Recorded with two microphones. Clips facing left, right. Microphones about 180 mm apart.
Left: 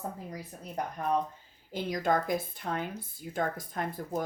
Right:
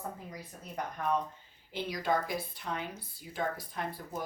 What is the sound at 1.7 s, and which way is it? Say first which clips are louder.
Speech: left 3 dB; 45° left (ahead or behind).